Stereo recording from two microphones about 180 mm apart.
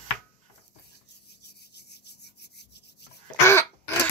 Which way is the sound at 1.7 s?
65° left (ahead or behind).